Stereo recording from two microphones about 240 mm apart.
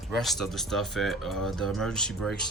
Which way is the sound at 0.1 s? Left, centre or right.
Centre.